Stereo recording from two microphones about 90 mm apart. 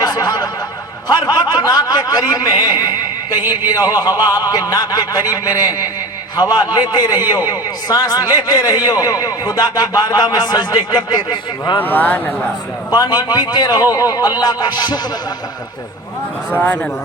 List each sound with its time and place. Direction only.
0.0 s snicker: 45° left (ahead or behind)
1.0 s a sound: 45° left (ahead or behind)
3.7 s a man's voice: 45° left (ahead or behind)
11.8 s speech: 20° left (ahead or behind)
12.9 s a man's voice: 50° left (ahead or behind)
16.5 s speech: 15° left (ahead or behind)